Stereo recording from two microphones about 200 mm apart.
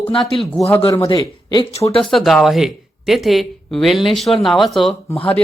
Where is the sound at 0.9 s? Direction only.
15° left (ahead or behind).